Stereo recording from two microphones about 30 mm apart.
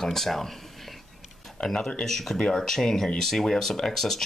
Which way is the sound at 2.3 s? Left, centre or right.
Left.